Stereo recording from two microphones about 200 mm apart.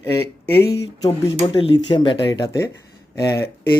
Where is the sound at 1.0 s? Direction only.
20° left (ahead or behind).